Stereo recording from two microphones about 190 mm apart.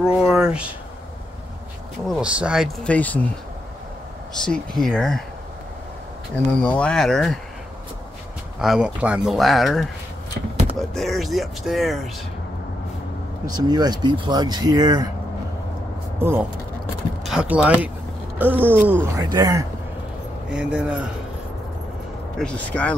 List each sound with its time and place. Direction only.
0.0 s speech: 5° right (ahead or behind)
2.0 s speech: 5° right (ahead or behind)
4.3 s speech: 5° left (ahead or behind)
6.3 s speech: 5° left (ahead or behind)
8.5 s speech: 5° right (ahead or behind)
13.6 s speech: 20° right (ahead or behind)
16.2 s speech: 10° right (ahead or behind)
20.4 s speech: 5° right (ahead or behind)
22.4 s speech: 5° left (ahead or behind)